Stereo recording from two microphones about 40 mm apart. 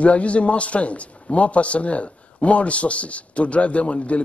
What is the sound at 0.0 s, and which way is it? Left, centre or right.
A man's voice, left.